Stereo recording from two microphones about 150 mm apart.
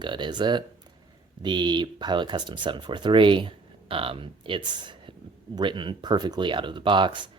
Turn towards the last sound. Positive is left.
turn(degrees=-30)  # may be behind; listen again after turning